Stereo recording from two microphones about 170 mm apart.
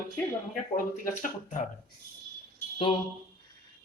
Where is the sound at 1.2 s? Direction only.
50° left (ahead or behind).